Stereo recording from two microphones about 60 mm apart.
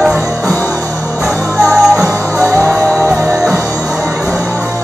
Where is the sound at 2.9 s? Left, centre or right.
Right.